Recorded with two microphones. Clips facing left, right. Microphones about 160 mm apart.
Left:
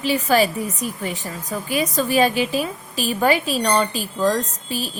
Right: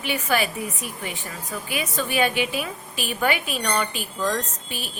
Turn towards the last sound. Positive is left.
turn(degrees=35)  # may be behind; listen again after turning